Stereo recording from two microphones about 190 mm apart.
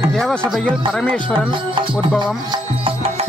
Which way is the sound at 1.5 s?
25° right (ahead or behind).